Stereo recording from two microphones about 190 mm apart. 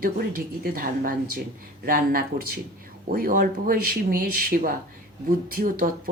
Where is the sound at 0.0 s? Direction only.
50° right (ahead or behind).